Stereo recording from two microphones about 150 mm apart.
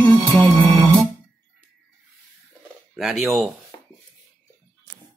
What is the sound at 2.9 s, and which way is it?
Speech, centre (ahead or behind).